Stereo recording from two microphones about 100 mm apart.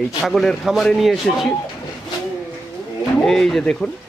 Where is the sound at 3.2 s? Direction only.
5° left (ahead or behind).